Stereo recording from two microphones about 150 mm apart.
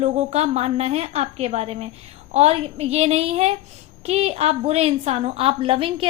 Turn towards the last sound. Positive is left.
turn(degrees=-35)  # may be behind; listen again after turning